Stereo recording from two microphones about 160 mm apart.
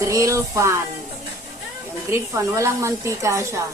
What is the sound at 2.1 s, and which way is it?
A woman's voice, 20° right (ahead or behind).